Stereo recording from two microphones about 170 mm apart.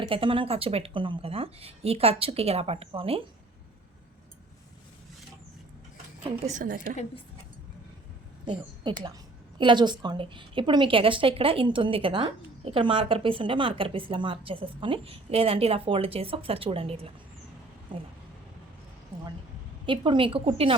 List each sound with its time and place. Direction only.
0.1 s a woman's voice: 30° right (ahead or behind)
6.4 s a woman's voice: 50° right (ahead or behind)
8.4 s a woman's voice: 25° right (ahead or behind)
19.8 s a woman's voice: 30° right (ahead or behind)